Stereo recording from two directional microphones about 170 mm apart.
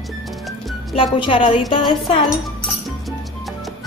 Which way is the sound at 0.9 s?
30° left (ahead or behind).